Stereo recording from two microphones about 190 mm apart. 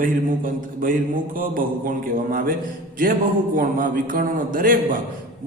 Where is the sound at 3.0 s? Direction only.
45° right (ahead or behind).